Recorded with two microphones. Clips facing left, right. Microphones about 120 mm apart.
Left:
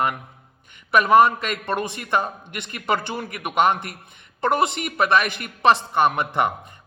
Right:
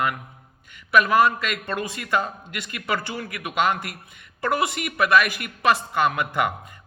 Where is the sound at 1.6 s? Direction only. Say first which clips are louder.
Left 3 dB; 25° left (ahead or behind).